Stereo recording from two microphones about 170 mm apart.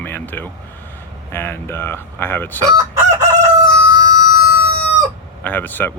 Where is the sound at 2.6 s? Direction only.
20° right (ahead or behind).